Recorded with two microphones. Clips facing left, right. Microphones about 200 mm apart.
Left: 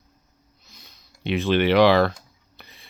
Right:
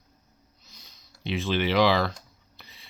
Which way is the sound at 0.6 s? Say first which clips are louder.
Left 4 dB; 60° left (ahead or behind).